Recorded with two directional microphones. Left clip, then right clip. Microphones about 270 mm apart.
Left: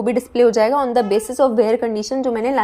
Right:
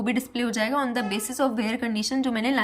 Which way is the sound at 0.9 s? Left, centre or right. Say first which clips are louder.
Left 11 dB; centre.